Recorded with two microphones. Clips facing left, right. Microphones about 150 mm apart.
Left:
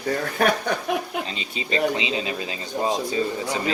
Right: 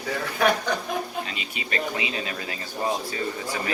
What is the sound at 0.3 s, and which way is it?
Chuckle, 55° left (ahead or behind).